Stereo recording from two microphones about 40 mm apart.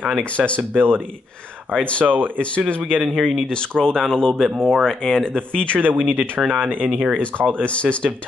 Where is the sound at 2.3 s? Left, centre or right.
Left.